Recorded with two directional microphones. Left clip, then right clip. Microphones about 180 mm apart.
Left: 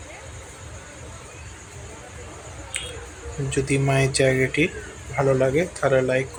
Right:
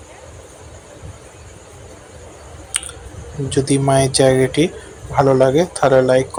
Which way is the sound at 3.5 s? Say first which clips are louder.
Right 7 dB; 20° right (ahead or behind).